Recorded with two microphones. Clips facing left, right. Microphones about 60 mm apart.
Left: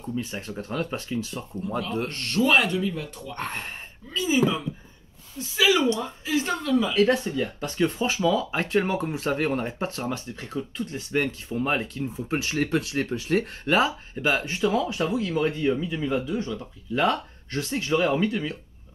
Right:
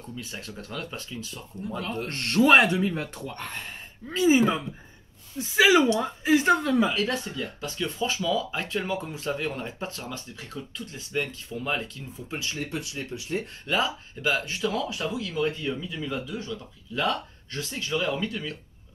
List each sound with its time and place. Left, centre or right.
0.1 s speech: left
2.0 s speech: right
3.3 s speech: left
4.1 s speech: right
7.3 s speech: left
12.5 s speech: left
13.7 s speech: left